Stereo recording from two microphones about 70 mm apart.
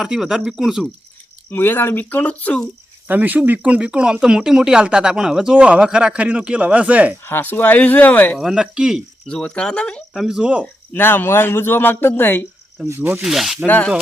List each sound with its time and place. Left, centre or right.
0.0 s speech: centre
1.5 s speech: left
3.1 s speech: right
7.3 s speech: left
8.5 s speech: centre
9.2 s speech: centre
10.2 s speech: centre
10.9 s speech: left
13.0 s speech: right
13.2 s speech: centre